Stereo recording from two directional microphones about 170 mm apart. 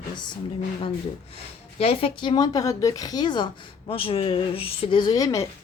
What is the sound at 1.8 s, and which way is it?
Speech, 35° left (ahead or behind).